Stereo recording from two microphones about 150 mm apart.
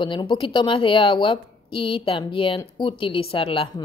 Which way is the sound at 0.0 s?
35° left (ahead or behind).